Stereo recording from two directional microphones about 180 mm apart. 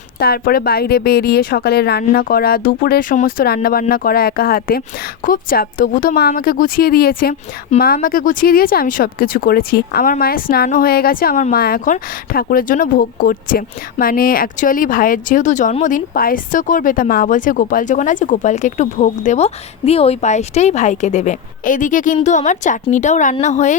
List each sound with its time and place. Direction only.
0.2 s a woman's voice: 60° left (ahead or behind); by 23.7 s 40° left (ahead or behind)